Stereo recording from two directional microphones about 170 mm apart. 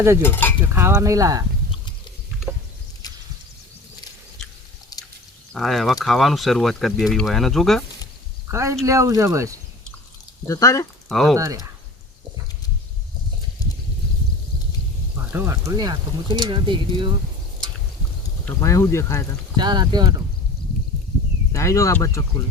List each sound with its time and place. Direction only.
0.2 s a sound: 10° left (ahead or behind)
0.6 s speech: 15° right (ahead or behind)
2.5 s a sound: 5° right (ahead or behind)
3.0 s a sound: 20° left (ahead or behind)
5.5 s speech: centre (ahead or behind)
8.4 s speech: 15° right (ahead or behind)
10.4 s speech: 20° left (ahead or behind)
11.1 s speech: centre (ahead or behind)
11.3 s speech: 20° right (ahead or behind)
15.3 s speech: 15° right (ahead or behind)
18.4 s speech: 15° left (ahead or behind)
19.5 s speech: 25° right (ahead or behind)
21.5 s speech: 20° left (ahead or behind)